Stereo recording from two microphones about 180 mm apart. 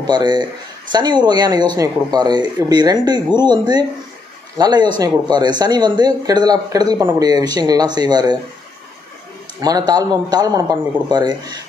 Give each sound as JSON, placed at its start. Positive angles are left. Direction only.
{"t": 0.0, "sound": "a man's voice", "side_deg": -25}
{"t": 9.6, "sound": "speech", "side_deg": -20}